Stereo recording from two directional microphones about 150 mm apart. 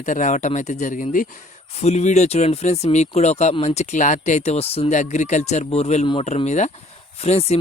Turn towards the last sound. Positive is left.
turn(degrees=45)  # may be behind; listen again after turning